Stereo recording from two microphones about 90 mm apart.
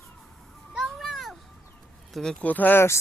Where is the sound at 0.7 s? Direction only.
5° right (ahead or behind).